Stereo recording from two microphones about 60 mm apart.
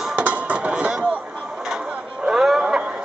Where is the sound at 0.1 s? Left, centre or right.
Right.